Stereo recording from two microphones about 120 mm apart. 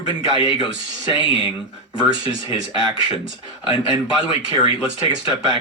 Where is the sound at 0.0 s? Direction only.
45° left (ahead or behind).